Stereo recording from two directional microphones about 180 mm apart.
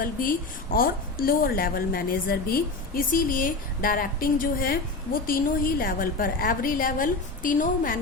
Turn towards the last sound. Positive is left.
turn(degrees=50)  # may be behind; listen again after turning